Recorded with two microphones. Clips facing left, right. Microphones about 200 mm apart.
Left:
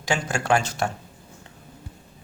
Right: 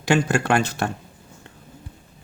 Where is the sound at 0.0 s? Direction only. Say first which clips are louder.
Right 6 dB; 60° right (ahead or behind).